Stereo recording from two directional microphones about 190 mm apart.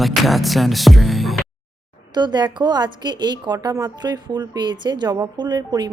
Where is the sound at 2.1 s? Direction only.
20° right (ahead or behind).